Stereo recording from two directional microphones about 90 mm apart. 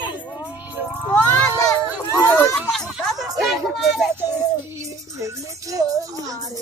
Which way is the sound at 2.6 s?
5° left (ahead or behind).